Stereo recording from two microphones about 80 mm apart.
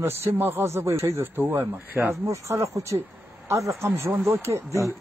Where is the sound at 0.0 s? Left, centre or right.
Right.